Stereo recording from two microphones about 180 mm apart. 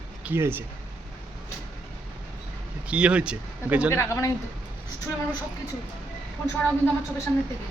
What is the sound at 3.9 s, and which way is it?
Speech, 15° left (ahead or behind).